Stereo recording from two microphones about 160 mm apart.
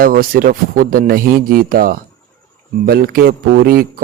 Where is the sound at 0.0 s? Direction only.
60° right (ahead or behind).